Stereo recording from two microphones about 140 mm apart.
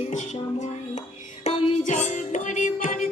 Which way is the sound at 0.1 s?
60° left (ahead or behind).